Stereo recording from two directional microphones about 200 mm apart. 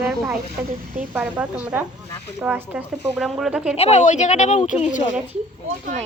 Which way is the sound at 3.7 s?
30° left (ahead or behind).